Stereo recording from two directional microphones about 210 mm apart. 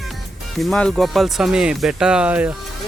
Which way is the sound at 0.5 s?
Centre (ahead or behind).